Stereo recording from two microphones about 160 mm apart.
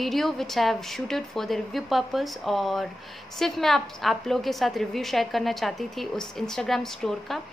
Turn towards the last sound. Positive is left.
turn(degrees=0)  # may be behind; listen again after turning